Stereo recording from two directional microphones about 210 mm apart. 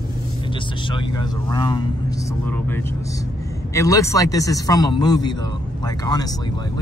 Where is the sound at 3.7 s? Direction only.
15° left (ahead or behind).